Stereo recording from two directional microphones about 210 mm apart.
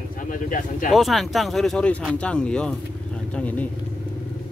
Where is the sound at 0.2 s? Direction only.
40° left (ahead or behind).